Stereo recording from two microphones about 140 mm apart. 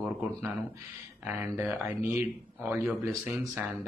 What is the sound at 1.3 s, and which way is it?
A man's voice, 15° right (ahead or behind).